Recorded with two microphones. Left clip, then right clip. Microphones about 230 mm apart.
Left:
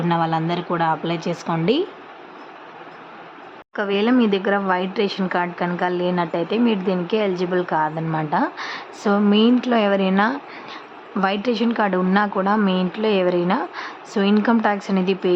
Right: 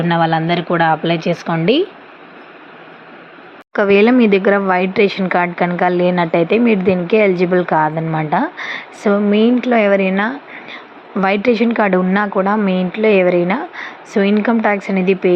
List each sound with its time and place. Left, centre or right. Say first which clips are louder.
0.0 s a woman's voice: right 6 dB; centre
3.7 s a woman's voice: right 9 dB; centre